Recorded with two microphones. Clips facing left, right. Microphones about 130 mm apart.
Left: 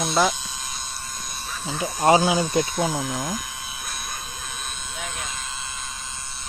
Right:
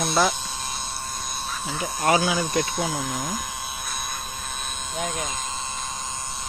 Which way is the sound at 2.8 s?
5° left (ahead or behind).